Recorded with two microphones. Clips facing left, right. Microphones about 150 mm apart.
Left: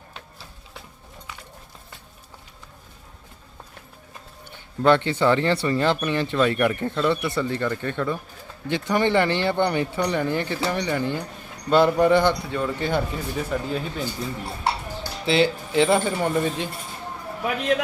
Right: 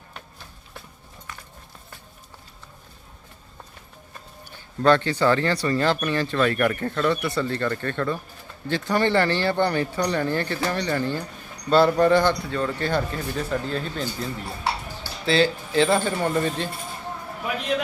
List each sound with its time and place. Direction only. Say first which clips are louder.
4.8 s speech: even; 20° left (ahead or behind)